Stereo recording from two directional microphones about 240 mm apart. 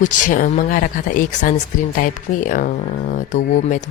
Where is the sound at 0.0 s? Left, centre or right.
Left.